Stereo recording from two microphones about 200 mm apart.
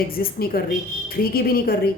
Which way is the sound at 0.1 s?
45° left (ahead or behind).